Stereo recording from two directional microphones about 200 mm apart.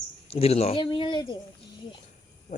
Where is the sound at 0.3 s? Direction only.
30° left (ahead or behind).